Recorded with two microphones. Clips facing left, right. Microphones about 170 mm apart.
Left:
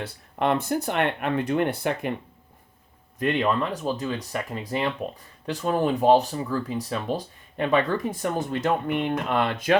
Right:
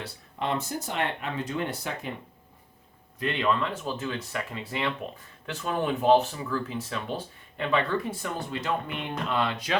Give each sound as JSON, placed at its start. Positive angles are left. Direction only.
{"t": 0.3, "sound": "speech", "side_deg": 60}
{"t": 3.4, "sound": "speech", "side_deg": 40}